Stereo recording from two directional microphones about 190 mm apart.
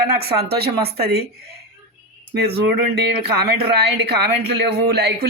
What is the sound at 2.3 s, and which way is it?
Speech, 55° right (ahead or behind).